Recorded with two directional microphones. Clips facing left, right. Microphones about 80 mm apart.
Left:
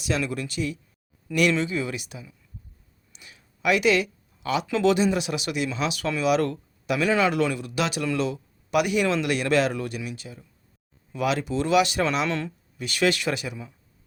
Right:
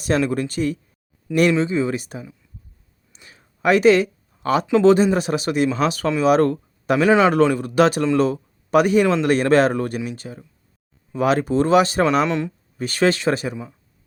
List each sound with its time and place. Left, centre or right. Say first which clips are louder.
0.2 s speech: right 7 dB; right
1.4 s speech: right 6 dB; right
3.1 s a sound: right 2 dB; right
4.8 s speech: right 6 dB; right
7.1 s a man's voice: right 7 dB; right
7.3 s speech: right 9 dB; right
12.2 s a man's voice: right 6 dB; right
12.7 s speech: right 5 dB; right